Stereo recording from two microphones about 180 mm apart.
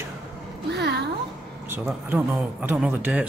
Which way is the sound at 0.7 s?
65° right (ahead or behind).